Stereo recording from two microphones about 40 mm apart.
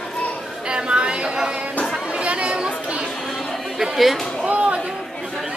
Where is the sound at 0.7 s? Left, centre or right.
Right.